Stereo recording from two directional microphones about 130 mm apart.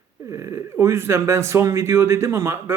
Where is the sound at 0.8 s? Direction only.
20° right (ahead or behind).